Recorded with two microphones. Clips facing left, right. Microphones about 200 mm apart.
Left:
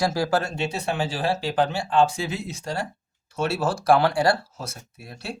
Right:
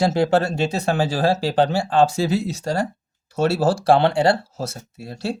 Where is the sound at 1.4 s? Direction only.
35° right (ahead or behind).